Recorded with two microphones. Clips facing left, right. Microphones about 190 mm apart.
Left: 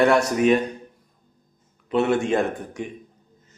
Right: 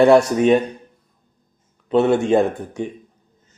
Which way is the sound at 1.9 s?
25° right (ahead or behind).